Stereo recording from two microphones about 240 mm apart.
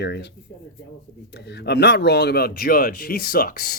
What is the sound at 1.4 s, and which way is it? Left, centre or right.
Speech, left.